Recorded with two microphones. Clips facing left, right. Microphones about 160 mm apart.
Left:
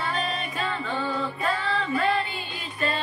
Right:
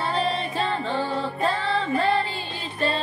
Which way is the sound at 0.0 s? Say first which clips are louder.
Right 4 dB; 30° right (ahead or behind).